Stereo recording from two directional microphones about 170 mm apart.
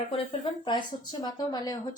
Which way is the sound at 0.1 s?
30° left (ahead or behind).